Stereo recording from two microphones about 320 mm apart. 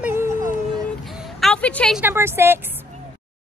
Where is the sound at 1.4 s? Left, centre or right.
Centre.